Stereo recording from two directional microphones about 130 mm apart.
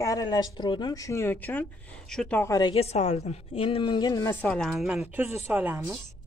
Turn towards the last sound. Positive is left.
turn(degrees=-15)  # may be behind; listen again after turning